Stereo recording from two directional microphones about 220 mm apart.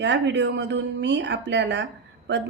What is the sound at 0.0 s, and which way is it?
Speech, 50° right (ahead or behind).